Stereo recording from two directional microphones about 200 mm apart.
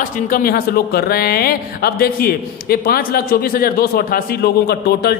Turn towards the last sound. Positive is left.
turn(degrees=50)  # may be behind; listen again after turning